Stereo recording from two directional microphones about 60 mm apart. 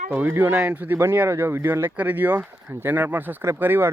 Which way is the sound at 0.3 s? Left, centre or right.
Right.